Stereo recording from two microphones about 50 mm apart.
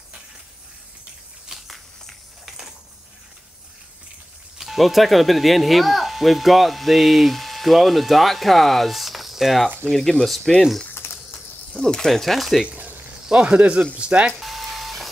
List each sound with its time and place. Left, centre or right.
1.5 s a sound: centre
4.6 s speech: centre
11.0 s insect: left
11.7 s speech: centre
13.3 s speech: right
14.4 s a sound: centre